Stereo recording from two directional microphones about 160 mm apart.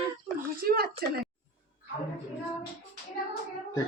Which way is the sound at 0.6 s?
70° right (ahead or behind).